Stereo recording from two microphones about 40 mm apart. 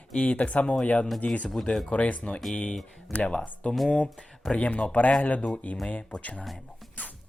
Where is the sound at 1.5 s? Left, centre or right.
Centre.